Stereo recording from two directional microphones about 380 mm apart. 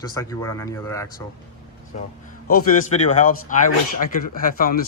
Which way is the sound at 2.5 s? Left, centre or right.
Left.